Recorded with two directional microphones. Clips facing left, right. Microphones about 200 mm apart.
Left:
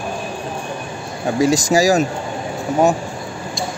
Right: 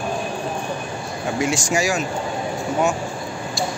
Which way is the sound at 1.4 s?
35° left (ahead or behind).